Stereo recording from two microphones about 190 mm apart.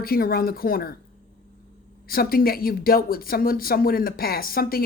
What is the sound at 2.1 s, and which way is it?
Speech, 50° left (ahead or behind).